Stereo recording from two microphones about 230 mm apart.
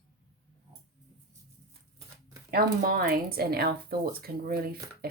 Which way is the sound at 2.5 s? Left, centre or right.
Right.